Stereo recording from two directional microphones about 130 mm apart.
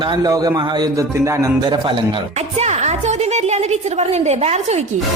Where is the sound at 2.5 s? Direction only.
60° right (ahead or behind).